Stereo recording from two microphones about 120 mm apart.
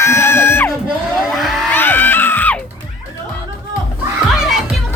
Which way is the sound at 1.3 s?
Centre (ahead or behind).